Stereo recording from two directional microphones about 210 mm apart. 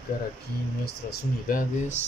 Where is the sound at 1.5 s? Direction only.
40° left (ahead or behind).